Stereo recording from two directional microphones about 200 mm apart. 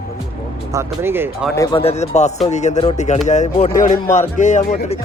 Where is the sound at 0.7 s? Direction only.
15° right (ahead or behind).